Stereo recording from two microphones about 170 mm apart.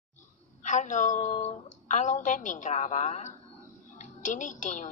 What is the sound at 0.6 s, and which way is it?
A woman's voice, 45° left (ahead or behind).